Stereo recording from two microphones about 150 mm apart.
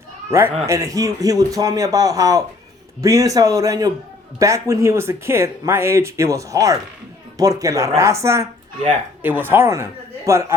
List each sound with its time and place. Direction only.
0.3 s speech: 20° right (ahead or behind)